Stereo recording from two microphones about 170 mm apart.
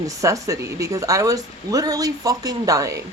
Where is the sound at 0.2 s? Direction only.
20° right (ahead or behind).